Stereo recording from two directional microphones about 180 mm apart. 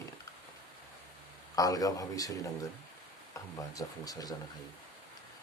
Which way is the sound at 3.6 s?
20° left (ahead or behind).